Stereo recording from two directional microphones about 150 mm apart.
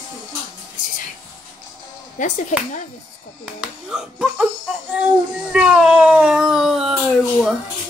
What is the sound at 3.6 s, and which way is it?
Speech, 5° right (ahead or behind).